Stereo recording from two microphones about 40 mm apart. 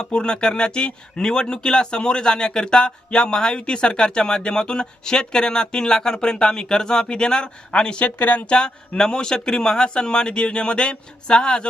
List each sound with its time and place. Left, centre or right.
0.1 s speech: left
7.9 s speech: left
8.4 s speech: left